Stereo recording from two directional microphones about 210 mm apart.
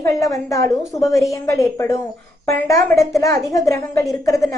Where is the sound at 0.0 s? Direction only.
15° left (ahead or behind).